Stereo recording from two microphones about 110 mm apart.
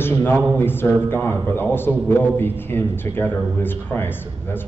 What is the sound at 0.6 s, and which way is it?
A man's voice, 20° left (ahead or behind).